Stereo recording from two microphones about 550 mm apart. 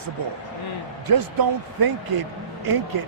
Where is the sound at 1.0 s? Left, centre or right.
Right.